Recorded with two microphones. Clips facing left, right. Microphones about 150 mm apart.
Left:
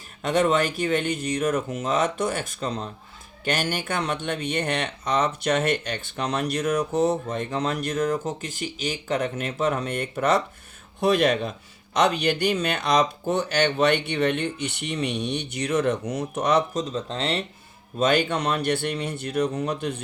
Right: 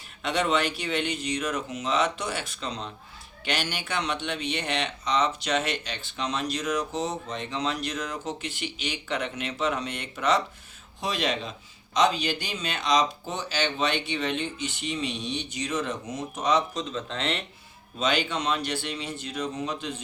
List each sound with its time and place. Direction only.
0.2 s speech: 45° left (ahead or behind)
16.9 s speech: 35° left (ahead or behind)
18.0 s speech: 50° left (ahead or behind)